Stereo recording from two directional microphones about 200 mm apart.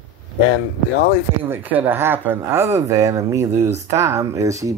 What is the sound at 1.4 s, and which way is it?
Speech, 10° right (ahead or behind).